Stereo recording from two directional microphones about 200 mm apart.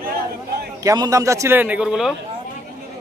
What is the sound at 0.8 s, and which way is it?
A man's voice, 20° right (ahead or behind).